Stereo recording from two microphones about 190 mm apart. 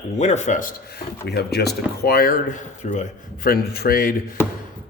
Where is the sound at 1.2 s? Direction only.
60° left (ahead or behind).